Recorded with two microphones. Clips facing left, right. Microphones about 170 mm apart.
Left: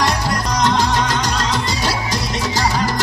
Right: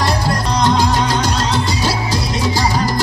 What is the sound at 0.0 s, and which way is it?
Music, 30° right (ahead or behind).